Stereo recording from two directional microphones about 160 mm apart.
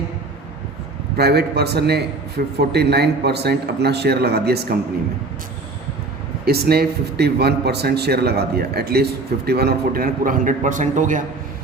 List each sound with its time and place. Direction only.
1.1 s a man's voice: 80° right
6.4 s a man's voice: 80° right; by 11.2 s 50° right (ahead or behind)